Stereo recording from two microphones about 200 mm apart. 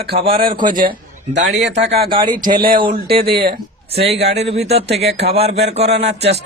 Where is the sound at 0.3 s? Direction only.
25° right (ahead or behind).